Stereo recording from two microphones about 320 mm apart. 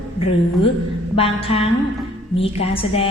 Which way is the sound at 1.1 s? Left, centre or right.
Centre.